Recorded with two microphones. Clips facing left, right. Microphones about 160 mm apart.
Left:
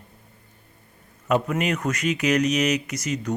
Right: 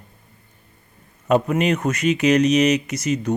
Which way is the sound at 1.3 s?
25° right (ahead or behind).